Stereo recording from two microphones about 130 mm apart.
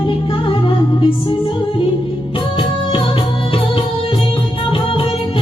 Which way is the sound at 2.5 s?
40° left (ahead or behind).